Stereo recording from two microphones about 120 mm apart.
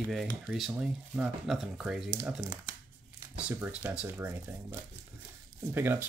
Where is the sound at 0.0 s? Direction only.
Centre (ahead or behind).